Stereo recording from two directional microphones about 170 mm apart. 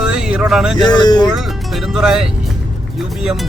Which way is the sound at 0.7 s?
25° left (ahead or behind).